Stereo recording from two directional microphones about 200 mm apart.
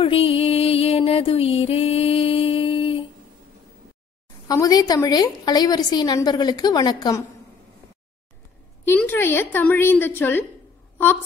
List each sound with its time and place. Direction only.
0.0 s music: 30° left (ahead or behind)
4.5 s a woman's voice: 20° left (ahead or behind)
8.8 s a woman's voice: 10° left (ahead or behind)